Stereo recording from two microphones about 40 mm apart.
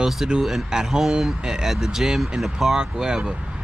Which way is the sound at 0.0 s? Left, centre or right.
Centre.